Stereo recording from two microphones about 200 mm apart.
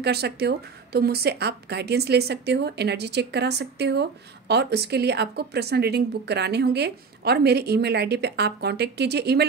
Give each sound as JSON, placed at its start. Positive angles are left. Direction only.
{"t": 0.0, "sound": "a woman's voice", "side_deg": -55}